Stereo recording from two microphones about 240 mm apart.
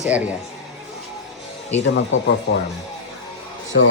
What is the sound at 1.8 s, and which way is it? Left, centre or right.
Speech, left.